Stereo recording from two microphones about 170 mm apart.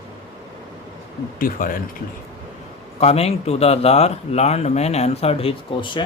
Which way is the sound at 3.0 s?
35° left (ahead or behind).